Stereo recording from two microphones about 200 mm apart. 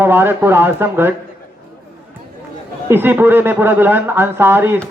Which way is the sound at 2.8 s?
10° right (ahead or behind).